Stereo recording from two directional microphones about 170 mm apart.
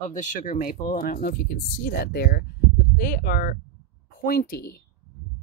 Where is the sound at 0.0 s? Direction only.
50° left (ahead or behind).